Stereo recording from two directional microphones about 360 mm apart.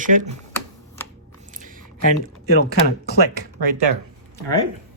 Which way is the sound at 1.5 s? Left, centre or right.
Right.